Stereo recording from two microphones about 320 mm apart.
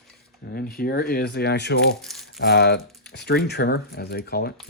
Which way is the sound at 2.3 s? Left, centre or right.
Left.